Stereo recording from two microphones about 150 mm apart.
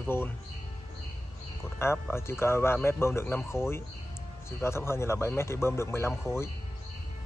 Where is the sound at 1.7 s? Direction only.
15° left (ahead or behind).